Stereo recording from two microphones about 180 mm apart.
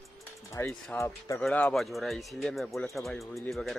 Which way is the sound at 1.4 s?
5° left (ahead or behind).